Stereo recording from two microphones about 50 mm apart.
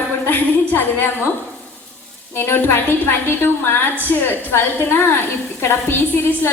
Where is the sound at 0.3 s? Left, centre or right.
Left.